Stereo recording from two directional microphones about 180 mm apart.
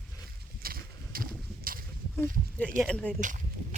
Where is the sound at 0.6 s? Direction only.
55° right (ahead or behind).